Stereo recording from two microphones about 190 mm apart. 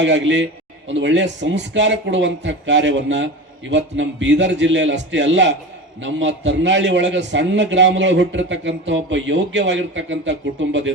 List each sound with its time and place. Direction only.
0.0 s a man's voice: 75° right (ahead or behind)